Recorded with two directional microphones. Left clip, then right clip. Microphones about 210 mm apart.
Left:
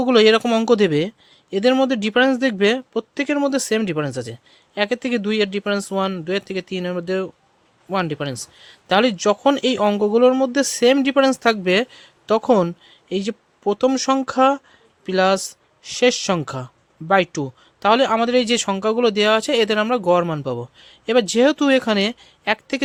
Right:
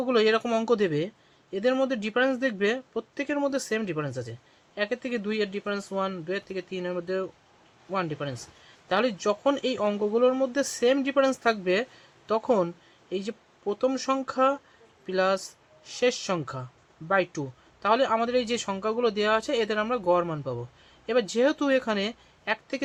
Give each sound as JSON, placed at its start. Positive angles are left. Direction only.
{"t": 0.0, "sound": "a man's voice", "side_deg": 50}